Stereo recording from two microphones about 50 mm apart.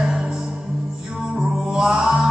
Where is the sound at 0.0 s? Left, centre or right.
Centre.